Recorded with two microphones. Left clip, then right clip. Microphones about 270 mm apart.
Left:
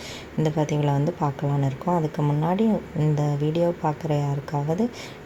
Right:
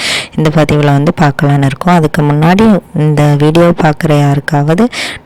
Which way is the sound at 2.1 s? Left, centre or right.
Right.